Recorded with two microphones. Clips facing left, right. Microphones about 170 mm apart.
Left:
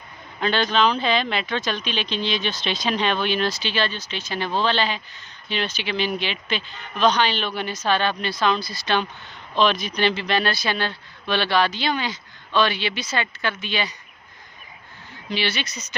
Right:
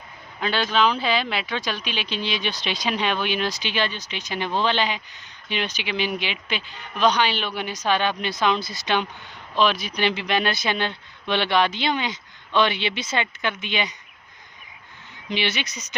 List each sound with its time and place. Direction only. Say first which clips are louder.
0.3 s speech: left 1 dB; 5° right (ahead or behind)
15.3 s speech: even; 20° right (ahead or behind)